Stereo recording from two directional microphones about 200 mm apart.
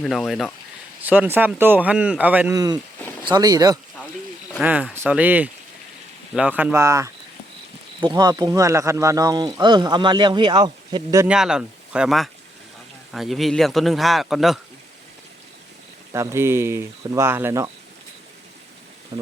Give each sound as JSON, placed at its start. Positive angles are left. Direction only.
{"t": 0.0, "sound": "a man's voice", "side_deg": 0}
{"t": 4.6, "sound": "speech", "side_deg": -10}
{"t": 11.3, "sound": "a man's voice", "side_deg": -5}
{"t": 16.1, "sound": "speech", "side_deg": -15}
{"t": 19.1, "sound": "speech", "side_deg": -15}